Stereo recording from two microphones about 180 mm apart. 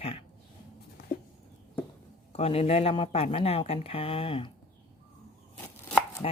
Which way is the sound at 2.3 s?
35° left (ahead or behind).